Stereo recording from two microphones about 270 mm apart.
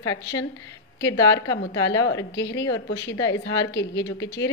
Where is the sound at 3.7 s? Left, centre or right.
Left.